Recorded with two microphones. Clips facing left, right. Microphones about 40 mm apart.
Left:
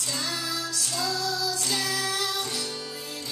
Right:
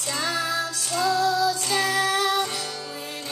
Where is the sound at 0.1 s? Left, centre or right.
Right.